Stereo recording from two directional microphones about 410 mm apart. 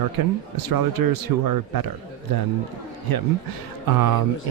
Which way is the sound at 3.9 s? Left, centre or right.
Right.